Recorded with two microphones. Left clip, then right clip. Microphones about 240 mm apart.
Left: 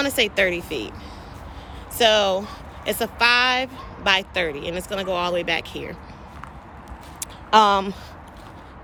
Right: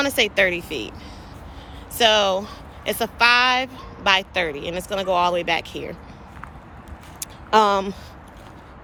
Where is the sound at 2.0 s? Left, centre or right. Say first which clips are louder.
Even; right.